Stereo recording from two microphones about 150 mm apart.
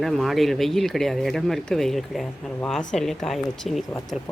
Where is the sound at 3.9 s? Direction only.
20° left (ahead or behind).